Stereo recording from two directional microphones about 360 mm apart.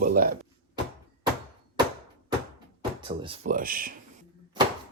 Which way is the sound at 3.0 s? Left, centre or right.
Centre.